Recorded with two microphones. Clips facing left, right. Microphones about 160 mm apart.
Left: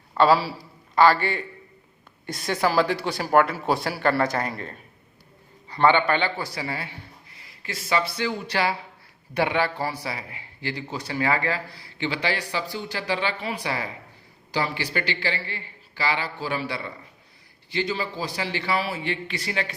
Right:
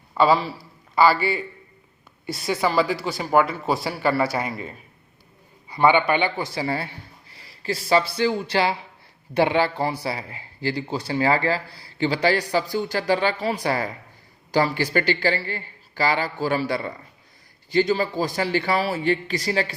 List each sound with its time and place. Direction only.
0.1 s a man's voice: centre (ahead or behind); by 19.7 s 35° right (ahead or behind)